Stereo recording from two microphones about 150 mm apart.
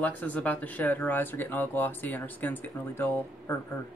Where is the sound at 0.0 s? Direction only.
10° left (ahead or behind).